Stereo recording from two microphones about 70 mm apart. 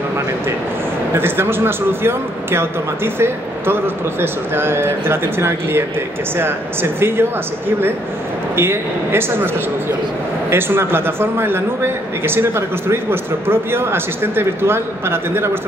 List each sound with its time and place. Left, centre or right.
1.1 s a man's voice: right
10.5 s a man's voice: right